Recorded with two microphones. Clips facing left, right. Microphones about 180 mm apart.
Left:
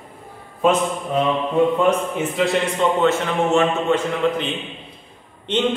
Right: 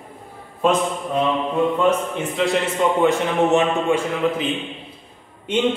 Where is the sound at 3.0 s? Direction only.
15° right (ahead or behind).